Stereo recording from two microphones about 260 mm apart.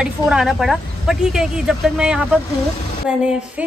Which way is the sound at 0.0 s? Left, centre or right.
Centre.